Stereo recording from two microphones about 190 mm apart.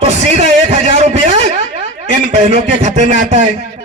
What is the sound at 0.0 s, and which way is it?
Music, 35° right (ahead or behind).